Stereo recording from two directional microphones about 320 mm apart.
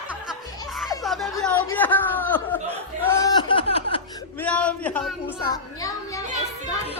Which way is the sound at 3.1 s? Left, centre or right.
Centre.